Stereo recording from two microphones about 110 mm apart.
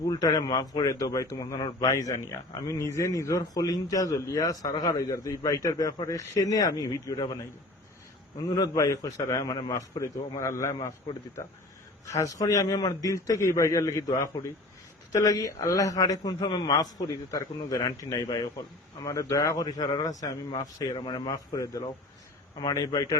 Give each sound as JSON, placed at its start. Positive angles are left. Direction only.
{"t": 0.1, "sound": "a man's voice", "side_deg": 35}
{"t": 8.4, "sound": "a man's voice", "side_deg": 35}
{"t": 10.0, "sound": "a man's voice", "side_deg": 25}
{"t": 12.0, "sound": "a man's voice", "side_deg": 30}